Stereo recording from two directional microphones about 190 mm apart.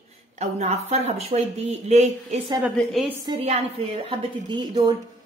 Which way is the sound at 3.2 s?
30° right (ahead or behind).